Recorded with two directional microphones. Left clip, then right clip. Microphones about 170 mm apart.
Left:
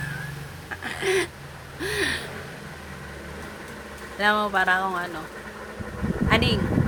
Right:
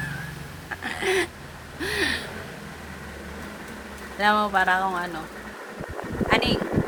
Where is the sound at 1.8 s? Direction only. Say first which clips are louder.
Right 1 dB; 10° right (ahead or behind).